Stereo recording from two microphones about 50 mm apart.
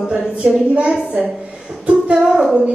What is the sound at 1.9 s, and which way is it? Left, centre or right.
Music, right.